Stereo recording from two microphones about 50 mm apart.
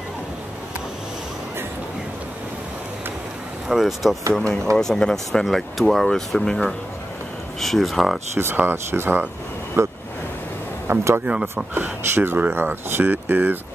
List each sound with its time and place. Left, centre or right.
3.6 s speech: centre
4.3 s speech: centre
7.6 s speech: centre
8.4 s speech: right
9.8 s speech: right
12.2 s speech: right